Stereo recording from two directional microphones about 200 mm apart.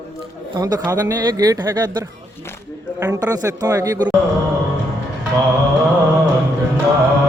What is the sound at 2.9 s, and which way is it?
Speech, 15° right (ahead or behind).